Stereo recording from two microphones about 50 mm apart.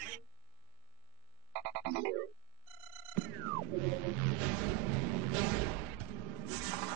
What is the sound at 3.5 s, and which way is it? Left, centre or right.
Music, right.